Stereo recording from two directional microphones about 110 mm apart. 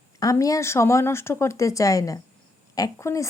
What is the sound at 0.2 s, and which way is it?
Speech, 30° left (ahead or behind).